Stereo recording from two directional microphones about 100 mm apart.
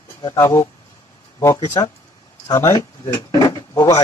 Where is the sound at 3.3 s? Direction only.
35° left (ahead or behind).